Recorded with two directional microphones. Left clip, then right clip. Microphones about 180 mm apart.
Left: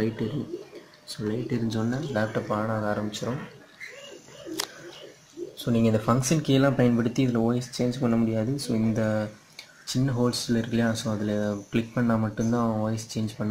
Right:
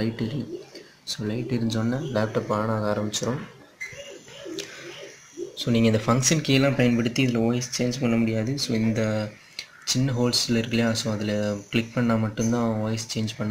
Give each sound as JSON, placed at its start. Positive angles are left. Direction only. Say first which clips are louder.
{"t": 1.0, "sound": "speech", "louder": "right 1 dB", "side_deg": -15}
{"t": 5.7, "sound": "speech", "louder": "right 2 dB", "side_deg": -5}